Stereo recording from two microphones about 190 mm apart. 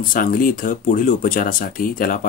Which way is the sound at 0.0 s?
45° left (ahead or behind).